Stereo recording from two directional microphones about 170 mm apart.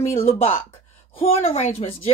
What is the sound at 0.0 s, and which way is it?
Speech, 35° left (ahead or behind).